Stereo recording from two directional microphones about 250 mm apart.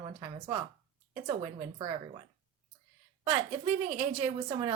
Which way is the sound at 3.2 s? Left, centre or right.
Right.